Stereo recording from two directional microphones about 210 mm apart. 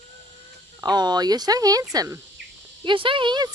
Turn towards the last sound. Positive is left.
turn(degrees=-20)  # may be behind; listen again after turning